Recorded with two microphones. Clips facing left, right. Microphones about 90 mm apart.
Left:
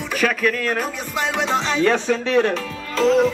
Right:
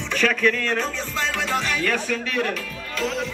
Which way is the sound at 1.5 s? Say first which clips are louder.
Left 7 dB; 25° left (ahead or behind).